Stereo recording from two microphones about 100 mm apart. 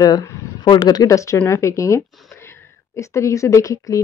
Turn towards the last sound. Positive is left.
turn(degrees=35)  # may be behind; listen again after turning